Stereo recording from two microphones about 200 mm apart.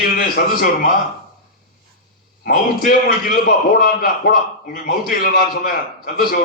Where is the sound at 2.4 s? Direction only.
45° left (ahead or behind).